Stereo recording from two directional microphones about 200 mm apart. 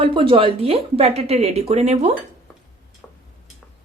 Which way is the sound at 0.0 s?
25° right (ahead or behind).